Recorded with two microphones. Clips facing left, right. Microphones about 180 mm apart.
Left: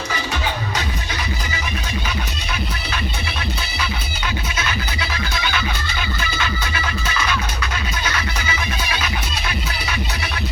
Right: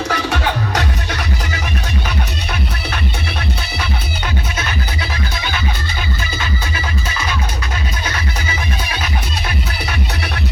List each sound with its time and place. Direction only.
0.1 s music: 65° right (ahead or behind)
2.0 s music: 50° right (ahead or behind)
6.7 s music: 30° right (ahead or behind)